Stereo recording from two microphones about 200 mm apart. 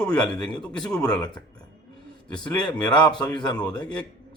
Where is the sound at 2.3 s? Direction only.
5° left (ahead or behind).